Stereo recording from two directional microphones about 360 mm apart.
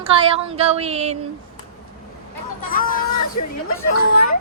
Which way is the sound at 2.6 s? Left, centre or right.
Left.